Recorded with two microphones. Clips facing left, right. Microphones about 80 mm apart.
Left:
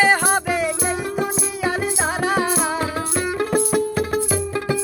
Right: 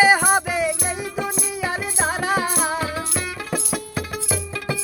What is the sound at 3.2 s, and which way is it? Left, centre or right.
Music, left.